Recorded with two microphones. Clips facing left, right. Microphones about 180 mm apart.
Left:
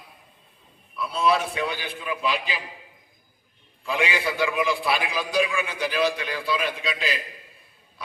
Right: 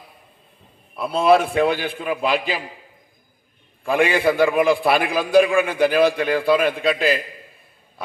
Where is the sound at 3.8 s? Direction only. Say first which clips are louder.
Right 8 dB; 55° right (ahead or behind).